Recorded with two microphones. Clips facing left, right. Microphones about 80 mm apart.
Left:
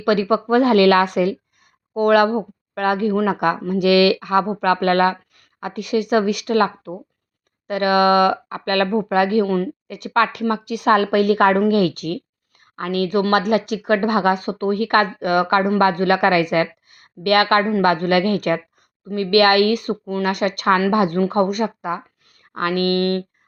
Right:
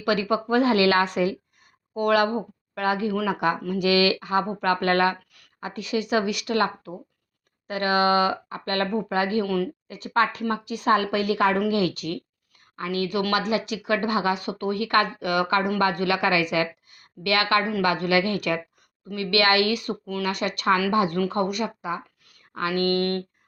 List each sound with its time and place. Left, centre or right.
0.0 s a woman's voice: left
9.9 s a woman's voice: left